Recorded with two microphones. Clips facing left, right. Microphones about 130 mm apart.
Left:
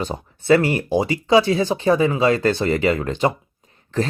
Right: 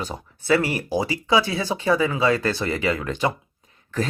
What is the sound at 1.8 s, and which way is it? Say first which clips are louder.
Speech: even; 40° left (ahead or behind).